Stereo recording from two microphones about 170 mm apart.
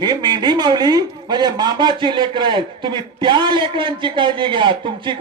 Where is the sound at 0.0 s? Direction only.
25° right (ahead or behind).